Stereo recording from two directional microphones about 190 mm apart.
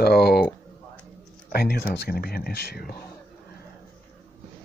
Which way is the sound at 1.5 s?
55° left (ahead or behind).